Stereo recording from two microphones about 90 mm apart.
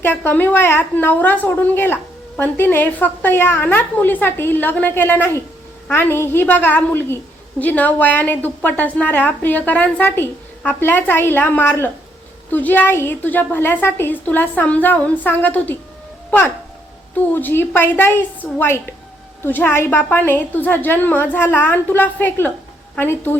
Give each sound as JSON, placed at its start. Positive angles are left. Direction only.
{"t": 0.3, "sound": "a woman's voice", "side_deg": 25}
{"t": 17.3, "sound": "a woman's voice", "side_deg": 25}